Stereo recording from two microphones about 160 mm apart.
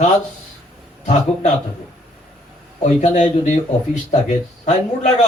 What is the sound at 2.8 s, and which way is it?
Speech, 50° left (ahead or behind).